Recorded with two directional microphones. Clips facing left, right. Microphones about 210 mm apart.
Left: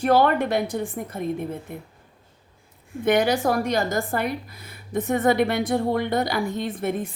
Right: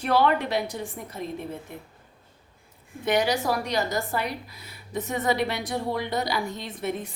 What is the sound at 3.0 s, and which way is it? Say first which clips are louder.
A woman's voice: left 4 dB; 55° left (ahead or behind).